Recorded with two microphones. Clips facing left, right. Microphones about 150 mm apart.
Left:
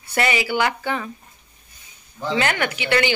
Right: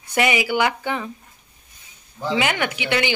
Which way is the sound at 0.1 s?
15° right (ahead or behind).